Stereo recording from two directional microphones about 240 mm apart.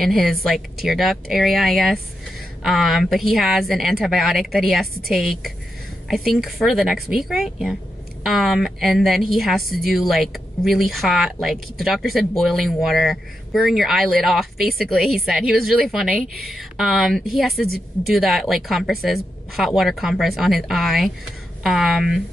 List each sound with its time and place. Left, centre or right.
0.0 s speech: centre